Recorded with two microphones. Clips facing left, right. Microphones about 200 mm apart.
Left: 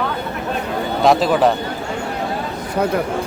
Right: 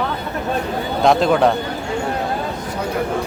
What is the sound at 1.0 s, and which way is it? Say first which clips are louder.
Speech: even; centre (ahead or behind).